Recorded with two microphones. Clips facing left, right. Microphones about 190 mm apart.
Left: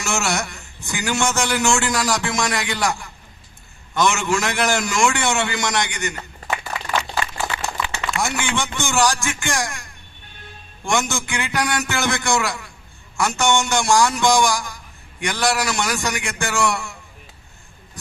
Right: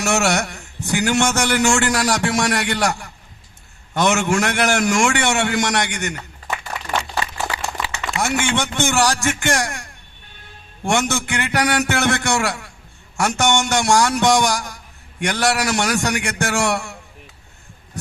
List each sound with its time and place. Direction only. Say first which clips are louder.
0.0 s a man's voice: right 5 dB; 65° right (ahead or behind)
8.2 s a man's voice: right 4 dB; 70° right (ahead or behind)